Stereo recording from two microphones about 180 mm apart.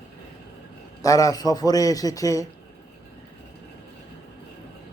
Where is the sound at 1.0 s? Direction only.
20° left (ahead or behind).